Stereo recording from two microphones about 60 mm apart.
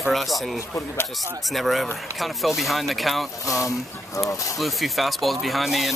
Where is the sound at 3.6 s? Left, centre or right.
Left.